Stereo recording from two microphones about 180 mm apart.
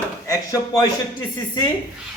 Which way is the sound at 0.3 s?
15° left (ahead or behind).